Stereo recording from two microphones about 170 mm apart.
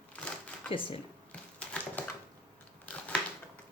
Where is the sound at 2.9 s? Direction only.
10° left (ahead or behind).